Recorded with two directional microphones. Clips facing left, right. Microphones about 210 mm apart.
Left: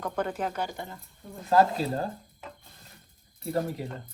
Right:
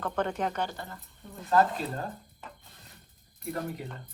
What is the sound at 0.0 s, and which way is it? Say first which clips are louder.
Speech: even; 5° left (ahead or behind).